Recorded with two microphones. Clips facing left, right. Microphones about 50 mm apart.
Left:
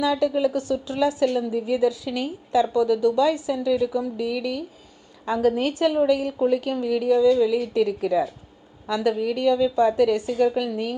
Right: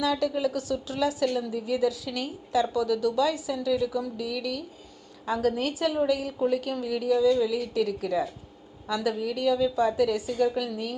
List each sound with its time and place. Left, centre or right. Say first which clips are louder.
0.0 s a woman's voice: left 5 dB; centre
7.2 s speech: left 4 dB; centre
7.7 s a woman's voice: left 5 dB; left
8.9 s a woman's voice: left 5 dB; centre